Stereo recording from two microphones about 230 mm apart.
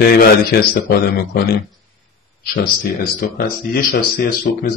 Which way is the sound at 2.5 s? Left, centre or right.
Left.